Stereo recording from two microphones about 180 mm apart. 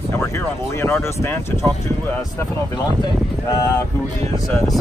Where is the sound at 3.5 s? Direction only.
20° left (ahead or behind).